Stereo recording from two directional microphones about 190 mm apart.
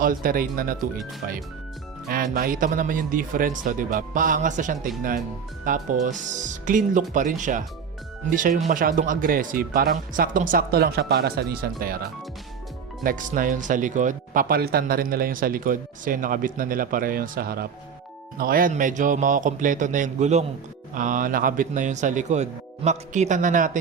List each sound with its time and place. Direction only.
0.0 s speech: 45° right (ahead or behind)
2.0 s speech: 50° right (ahead or behind)
13.0 s speech: 45° right (ahead or behind)